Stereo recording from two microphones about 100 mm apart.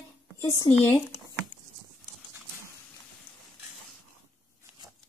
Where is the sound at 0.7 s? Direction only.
15° left (ahead or behind).